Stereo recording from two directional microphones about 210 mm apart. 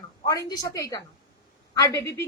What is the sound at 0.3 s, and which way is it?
A woman's voice, 20° left (ahead or behind).